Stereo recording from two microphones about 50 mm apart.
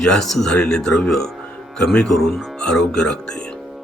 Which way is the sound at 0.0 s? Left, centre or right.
Centre.